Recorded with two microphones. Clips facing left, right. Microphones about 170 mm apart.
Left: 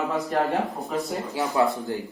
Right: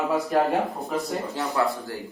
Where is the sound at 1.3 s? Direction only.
20° left (ahead or behind).